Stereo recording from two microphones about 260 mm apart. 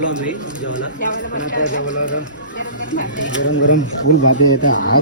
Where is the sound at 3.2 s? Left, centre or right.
Left.